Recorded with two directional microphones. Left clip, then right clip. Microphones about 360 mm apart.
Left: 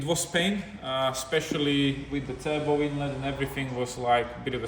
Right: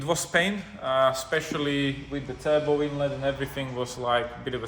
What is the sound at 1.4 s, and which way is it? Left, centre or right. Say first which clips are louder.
Speech: left 1 dB; centre.